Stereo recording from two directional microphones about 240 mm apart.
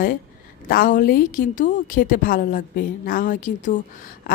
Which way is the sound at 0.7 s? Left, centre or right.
Left.